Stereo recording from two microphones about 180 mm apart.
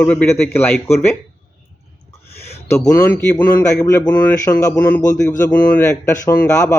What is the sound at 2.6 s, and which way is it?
Speech, 15° left (ahead or behind).